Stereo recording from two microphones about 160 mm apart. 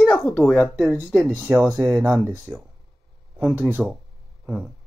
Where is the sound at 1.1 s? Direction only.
10° right (ahead or behind).